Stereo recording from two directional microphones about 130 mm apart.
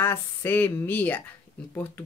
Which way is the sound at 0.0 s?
15° left (ahead or behind).